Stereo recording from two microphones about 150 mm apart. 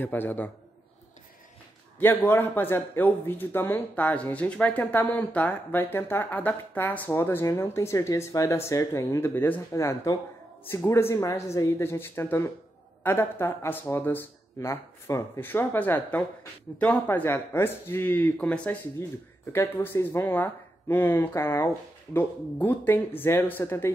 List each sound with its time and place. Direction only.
0.0 s speech: 15° left (ahead or behind)
2.0 s speech: 15° left (ahead or behind)